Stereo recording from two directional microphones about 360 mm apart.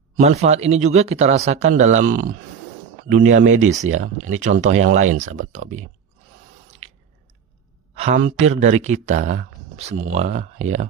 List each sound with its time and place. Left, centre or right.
0.2 s speech: centre
6.8 s squish: centre
7.9 s speech: centre